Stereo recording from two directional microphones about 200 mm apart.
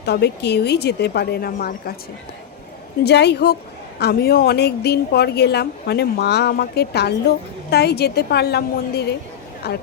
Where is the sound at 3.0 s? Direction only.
55° left (ahead or behind).